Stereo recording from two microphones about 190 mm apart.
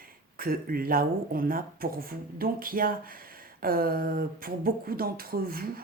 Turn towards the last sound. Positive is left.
turn(degrees=-50)  # may be behind; listen again after turning